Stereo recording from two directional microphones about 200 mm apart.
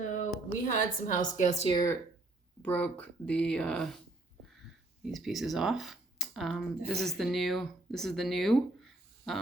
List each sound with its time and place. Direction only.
0.1 s a woman's voice: 40° left (ahead or behind)
1.6 s speech: 20° left (ahead or behind)
2.6 s speech: 5° left (ahead or behind)
5.0 s speech: centre (ahead or behind)